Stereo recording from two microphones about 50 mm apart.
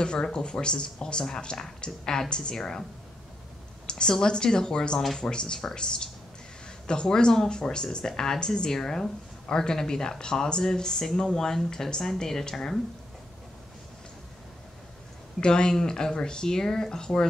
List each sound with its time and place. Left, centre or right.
0.0 s speech: centre
3.9 s speech: centre
15.4 s speech: centre